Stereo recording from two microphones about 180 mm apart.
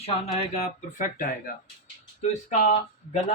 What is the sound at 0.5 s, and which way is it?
Speech, 40° left (ahead or behind).